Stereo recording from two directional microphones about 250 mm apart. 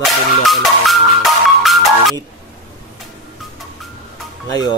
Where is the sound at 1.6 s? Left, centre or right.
Centre.